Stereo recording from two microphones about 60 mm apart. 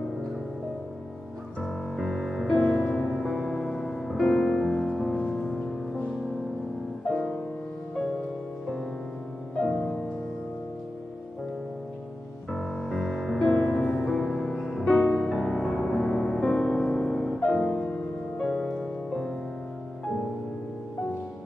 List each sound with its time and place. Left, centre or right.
1.6 s music: centre
2.4 s music: centre
7.1 s music: centre
9.6 s music: centre
12.4 s music: centre
19.0 s music: centre